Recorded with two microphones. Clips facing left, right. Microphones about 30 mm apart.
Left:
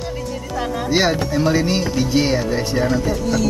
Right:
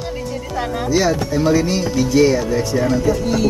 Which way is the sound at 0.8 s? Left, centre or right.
Left.